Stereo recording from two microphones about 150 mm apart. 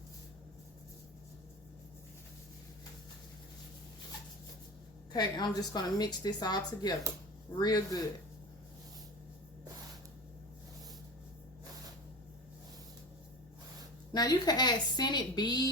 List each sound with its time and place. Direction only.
5.1 s a woman's voice: 25° left (ahead or behind)
14.1 s a woman's voice: 25° left (ahead or behind)